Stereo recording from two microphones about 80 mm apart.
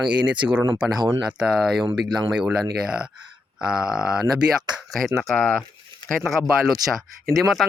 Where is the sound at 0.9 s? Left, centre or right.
Right.